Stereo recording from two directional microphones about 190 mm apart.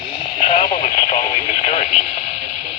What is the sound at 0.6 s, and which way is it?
Radio, 25° left (ahead or behind).